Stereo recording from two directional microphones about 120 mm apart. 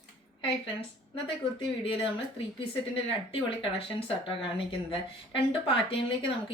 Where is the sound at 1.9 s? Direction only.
45° left (ahead or behind).